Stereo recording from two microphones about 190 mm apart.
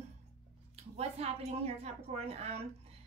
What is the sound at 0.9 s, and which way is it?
A woman's voice, 35° right (ahead or behind).